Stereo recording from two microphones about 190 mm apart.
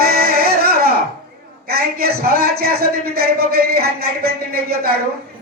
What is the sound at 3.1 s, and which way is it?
Music, 55° right (ahead or behind).